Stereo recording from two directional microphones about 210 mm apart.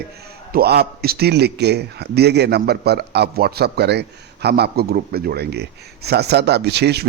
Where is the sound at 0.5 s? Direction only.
50° right (ahead or behind).